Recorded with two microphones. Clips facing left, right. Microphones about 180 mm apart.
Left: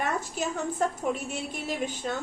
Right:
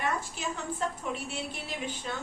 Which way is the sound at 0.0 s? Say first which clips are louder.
Left 3 dB; 45° left (ahead or behind).